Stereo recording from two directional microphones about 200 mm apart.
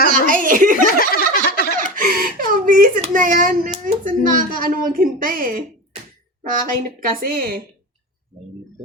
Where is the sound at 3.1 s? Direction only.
40° right (ahead or behind).